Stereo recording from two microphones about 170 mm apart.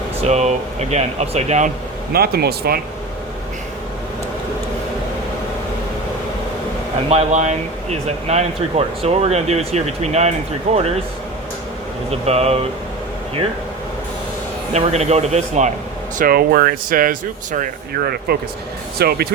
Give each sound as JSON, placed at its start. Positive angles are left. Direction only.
{"t": 0.3, "sound": "speech", "side_deg": -40}
{"t": 2.1, "sound": "speech", "side_deg": -65}
{"t": 7.1, "sound": "speech", "side_deg": -40}
{"t": 12.2, "sound": "speech", "side_deg": -35}
{"t": 14.7, "sound": "speech", "side_deg": -40}
{"t": 16.1, "sound": "speech", "side_deg": -60}